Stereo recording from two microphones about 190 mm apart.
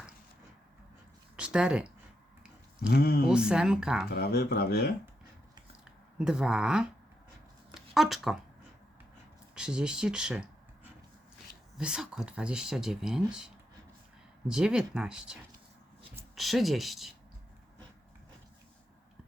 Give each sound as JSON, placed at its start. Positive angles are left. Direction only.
{"t": 1.4, "sound": "speech", "side_deg": -5}
{"t": 2.9, "sound": "speech", "side_deg": 55}
{"t": 3.2, "sound": "speech", "side_deg": -5}
{"t": 4.1, "sound": "speech", "side_deg": 55}
{"t": 6.1, "sound": "speech", "side_deg": -5}
{"t": 7.7, "sound": "a sound", "side_deg": 0}
{"t": 9.6, "sound": "speech", "side_deg": -5}
{"t": 11.8, "sound": "speech", "side_deg": -5}